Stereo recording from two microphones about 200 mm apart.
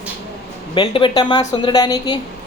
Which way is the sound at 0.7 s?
25° left (ahead or behind).